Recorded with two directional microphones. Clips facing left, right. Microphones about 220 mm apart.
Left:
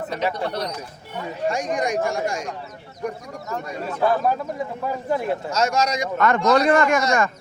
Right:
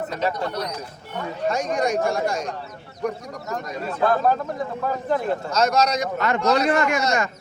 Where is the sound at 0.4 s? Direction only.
30° left (ahead or behind).